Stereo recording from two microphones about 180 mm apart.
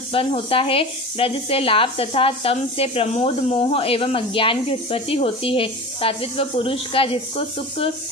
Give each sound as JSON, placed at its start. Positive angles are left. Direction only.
{"t": 0.1, "sound": "speech", "side_deg": 30}